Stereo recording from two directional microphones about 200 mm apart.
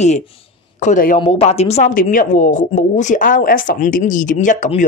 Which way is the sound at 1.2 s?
30° left (ahead or behind).